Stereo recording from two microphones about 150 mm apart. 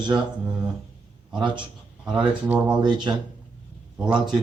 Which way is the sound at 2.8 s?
30° right (ahead or behind).